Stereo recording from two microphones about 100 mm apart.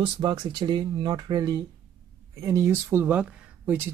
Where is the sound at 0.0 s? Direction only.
50° right (ahead or behind).